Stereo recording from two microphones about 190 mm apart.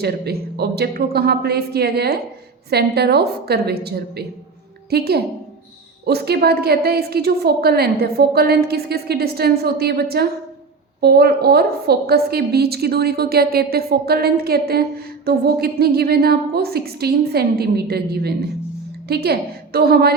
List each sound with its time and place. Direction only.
0.0 s a woman's voice: 55° right (ahead or behind)